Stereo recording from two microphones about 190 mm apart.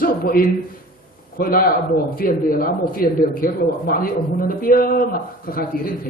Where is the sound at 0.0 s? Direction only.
50° left (ahead or behind).